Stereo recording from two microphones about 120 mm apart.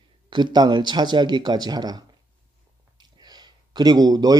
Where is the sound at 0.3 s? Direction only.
35° right (ahead or behind).